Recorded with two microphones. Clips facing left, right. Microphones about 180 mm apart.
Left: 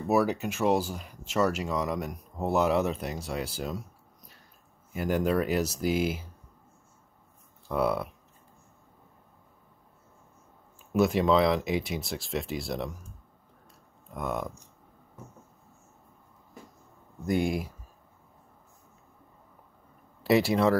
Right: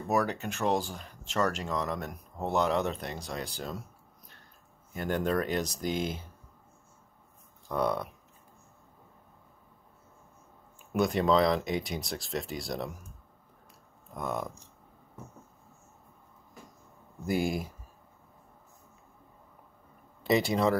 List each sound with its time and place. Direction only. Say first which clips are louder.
0.1 s speech: left 4 dB; 10° left (ahead or behind)
4.9 s speech: left 3 dB; 5° left (ahead or behind)
7.6 s speech: left 2 dB; 5° left (ahead or behind)
10.9 s speech: left 2 dB; centre (ahead or behind)
14.1 s speech: left 2 dB; centre (ahead or behind)
17.3 s speech: left 2 dB; centre (ahead or behind)
20.2 s speech: left 3 dB; centre (ahead or behind)